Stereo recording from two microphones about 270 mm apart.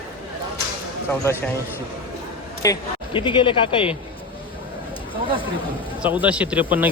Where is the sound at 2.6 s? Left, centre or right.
Centre.